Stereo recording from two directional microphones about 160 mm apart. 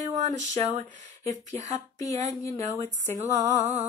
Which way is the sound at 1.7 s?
20° left (ahead or behind).